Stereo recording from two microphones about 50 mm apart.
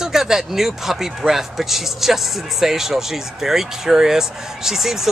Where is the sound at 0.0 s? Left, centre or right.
Centre.